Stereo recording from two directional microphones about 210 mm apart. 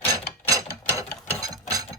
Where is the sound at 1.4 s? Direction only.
15° right (ahead or behind).